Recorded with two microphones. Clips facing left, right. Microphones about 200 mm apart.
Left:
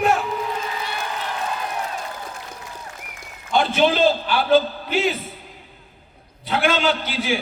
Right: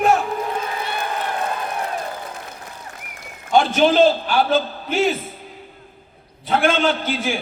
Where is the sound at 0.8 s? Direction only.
55° right (ahead or behind).